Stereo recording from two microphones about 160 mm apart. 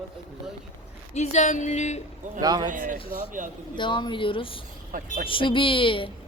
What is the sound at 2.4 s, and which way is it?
Speech, 25° right (ahead or behind).